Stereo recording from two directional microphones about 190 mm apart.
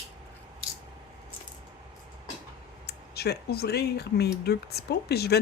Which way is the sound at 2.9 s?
55° left (ahead or behind).